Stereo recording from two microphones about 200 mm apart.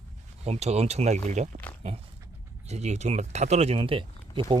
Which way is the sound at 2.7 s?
35° right (ahead or behind).